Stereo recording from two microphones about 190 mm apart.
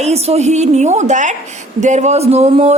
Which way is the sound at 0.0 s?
35° right (ahead or behind).